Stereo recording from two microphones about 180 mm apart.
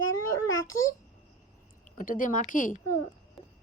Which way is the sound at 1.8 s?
45° left (ahead or behind).